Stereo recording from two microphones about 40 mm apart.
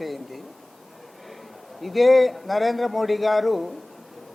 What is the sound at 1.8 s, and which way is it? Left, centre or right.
Speech, centre.